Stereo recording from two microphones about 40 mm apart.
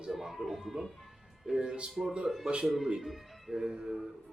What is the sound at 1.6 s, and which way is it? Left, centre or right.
Speech, right.